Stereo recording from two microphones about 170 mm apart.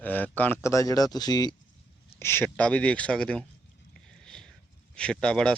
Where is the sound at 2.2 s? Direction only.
15° left (ahead or behind).